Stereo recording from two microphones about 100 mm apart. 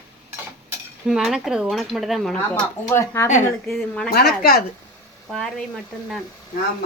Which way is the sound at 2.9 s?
25° left (ahead or behind).